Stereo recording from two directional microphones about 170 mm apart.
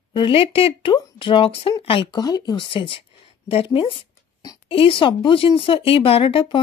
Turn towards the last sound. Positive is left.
turn(degrees=30)  # may be behind; listen again after turning